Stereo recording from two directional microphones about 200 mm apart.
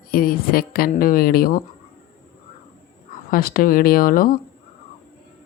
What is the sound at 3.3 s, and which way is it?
A woman's voice, 45° left (ahead or behind).